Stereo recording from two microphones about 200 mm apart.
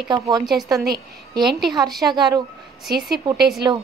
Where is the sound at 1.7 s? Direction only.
20° right (ahead or behind).